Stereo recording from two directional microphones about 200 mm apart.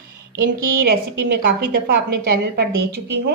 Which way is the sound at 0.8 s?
55° right (ahead or behind).